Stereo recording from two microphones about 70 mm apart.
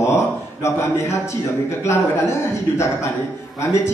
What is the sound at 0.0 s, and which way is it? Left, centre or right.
A man's voice, left.